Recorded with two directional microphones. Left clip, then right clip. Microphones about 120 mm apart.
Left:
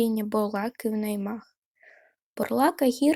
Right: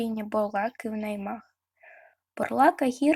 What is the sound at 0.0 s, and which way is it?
Speech, 35° left (ahead or behind).